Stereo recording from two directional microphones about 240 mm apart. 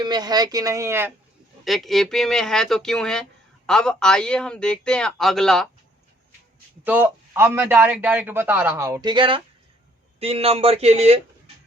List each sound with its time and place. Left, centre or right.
0.0 s a man's voice: centre
1.6 s speech: centre
6.8 s a man's voice: centre; by 11.5 s right